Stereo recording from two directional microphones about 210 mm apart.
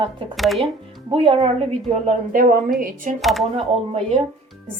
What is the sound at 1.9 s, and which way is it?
Speech, 35° right (ahead or behind).